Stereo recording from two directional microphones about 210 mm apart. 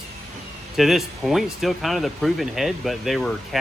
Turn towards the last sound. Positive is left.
turn(degrees=0)  # may be behind; listen again after turning